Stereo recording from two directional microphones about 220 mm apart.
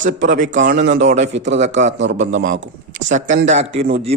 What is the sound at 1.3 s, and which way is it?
Speech, 55° right (ahead or behind).